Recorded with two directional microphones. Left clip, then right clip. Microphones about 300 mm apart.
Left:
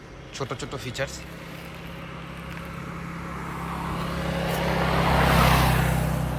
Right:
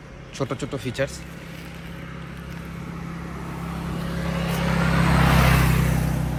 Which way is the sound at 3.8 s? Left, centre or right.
Centre.